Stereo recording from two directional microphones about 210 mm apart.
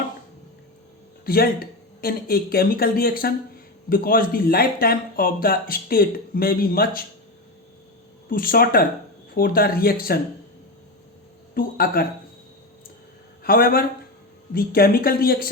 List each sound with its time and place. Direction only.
1.2 s speech: 45° left (ahead or behind)
8.3 s speech: 45° left (ahead or behind)
11.5 s speech: 45° left (ahead or behind)
13.4 s speech: 45° left (ahead or behind)